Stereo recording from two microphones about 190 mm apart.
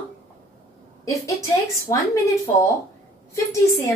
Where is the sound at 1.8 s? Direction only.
15° left (ahead or behind).